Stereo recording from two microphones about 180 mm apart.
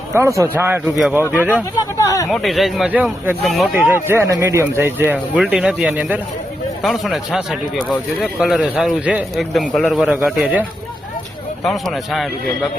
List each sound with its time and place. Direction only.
0.1 s speech: 15° right (ahead or behind)
2.0 s a sound: 20° left (ahead or behind)
2.3 s speech: centre (ahead or behind)
3.8 s speech: 10° right (ahead or behind)